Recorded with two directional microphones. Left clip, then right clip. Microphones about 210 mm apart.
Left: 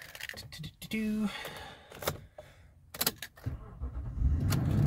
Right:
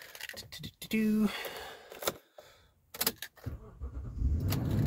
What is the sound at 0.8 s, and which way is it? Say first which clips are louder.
Speech: right 4 dB; 45° right (ahead or behind).